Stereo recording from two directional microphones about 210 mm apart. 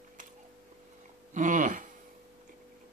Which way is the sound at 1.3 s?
35° right (ahead or behind).